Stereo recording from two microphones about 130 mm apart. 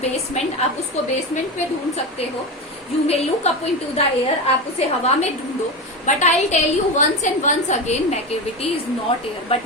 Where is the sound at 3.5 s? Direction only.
55° left (ahead or behind).